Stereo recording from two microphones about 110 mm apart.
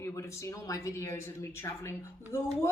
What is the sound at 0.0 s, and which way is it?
Speech, 25° left (ahead or behind).